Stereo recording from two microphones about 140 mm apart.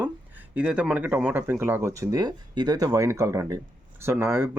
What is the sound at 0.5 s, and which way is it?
Speech, 10° right (ahead or behind).